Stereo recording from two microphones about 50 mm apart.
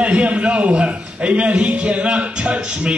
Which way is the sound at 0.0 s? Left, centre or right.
Right.